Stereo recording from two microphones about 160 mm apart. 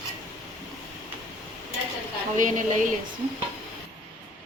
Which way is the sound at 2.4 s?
50° right (ahead or behind).